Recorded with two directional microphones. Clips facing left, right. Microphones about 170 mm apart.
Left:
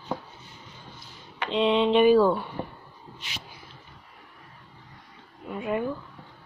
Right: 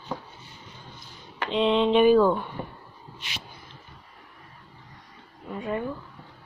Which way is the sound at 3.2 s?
70° right (ahead or behind).